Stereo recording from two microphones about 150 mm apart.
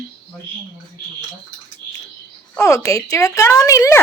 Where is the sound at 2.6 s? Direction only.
20° left (ahead or behind).